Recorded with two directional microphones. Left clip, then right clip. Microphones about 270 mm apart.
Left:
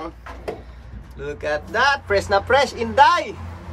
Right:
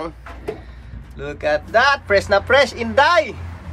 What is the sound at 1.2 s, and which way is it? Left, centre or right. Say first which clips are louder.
Speech: right 4 dB; centre.